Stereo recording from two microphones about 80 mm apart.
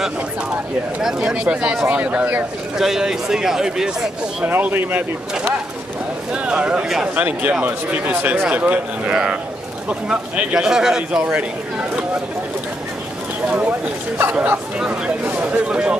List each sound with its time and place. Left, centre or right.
1.0 s speech: centre
2.8 s speech: centre
4.5 s speech: right
6.3 s speech: centre
13.5 s speech: centre